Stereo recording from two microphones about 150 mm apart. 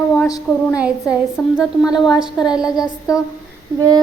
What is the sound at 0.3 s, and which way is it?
Speech, 25° left (ahead or behind).